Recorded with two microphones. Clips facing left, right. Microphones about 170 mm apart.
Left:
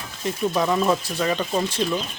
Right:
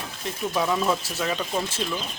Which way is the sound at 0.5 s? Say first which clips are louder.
Left 2 dB; centre (ahead or behind).